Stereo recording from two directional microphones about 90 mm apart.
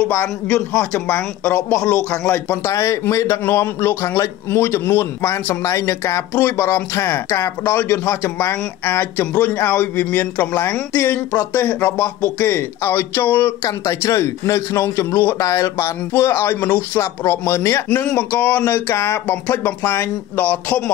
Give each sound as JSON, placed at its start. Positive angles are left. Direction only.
{"t": 0.1, "sound": "speech", "side_deg": 25}
{"t": 2.6, "sound": "speech", "side_deg": 35}
{"t": 15.3, "sound": "speech", "side_deg": 35}